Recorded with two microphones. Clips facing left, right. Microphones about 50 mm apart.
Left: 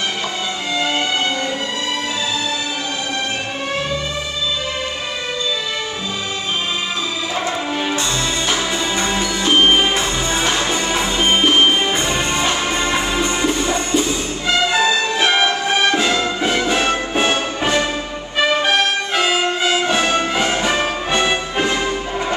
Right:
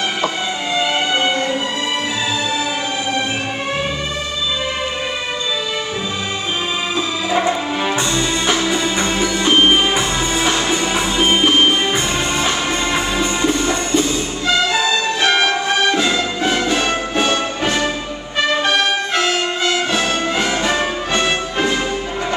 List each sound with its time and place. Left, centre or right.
0.7 s music: centre
9.0 s music: centre